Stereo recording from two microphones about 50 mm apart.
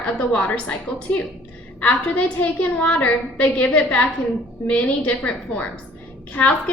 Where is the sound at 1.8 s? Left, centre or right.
Left.